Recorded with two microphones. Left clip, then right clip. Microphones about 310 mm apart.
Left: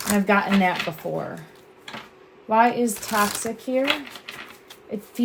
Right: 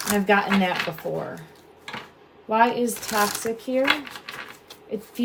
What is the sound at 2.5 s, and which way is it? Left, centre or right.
A woman's voice, centre.